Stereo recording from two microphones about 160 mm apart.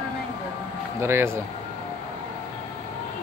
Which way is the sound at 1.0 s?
15° right (ahead or behind).